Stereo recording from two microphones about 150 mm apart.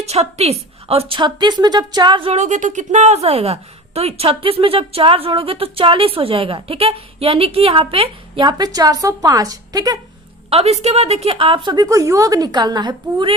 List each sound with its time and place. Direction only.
0.0 s a woman's voice: 45° right (ahead or behind)
2.3 s a woman's voice: 50° right (ahead or behind); by 10.0 s 25° right (ahead or behind)
10.5 s a woman's voice: 40° right (ahead or behind)